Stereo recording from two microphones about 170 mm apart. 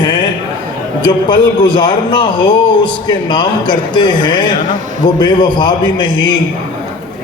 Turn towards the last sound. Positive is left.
turn(degrees=25)  # may be behind; listen again after turning